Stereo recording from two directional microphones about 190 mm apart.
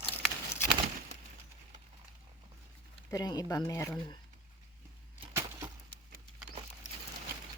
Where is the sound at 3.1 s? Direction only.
20° left (ahead or behind).